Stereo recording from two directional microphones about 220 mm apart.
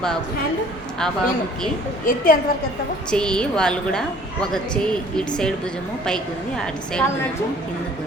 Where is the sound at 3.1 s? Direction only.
5° left (ahead or behind).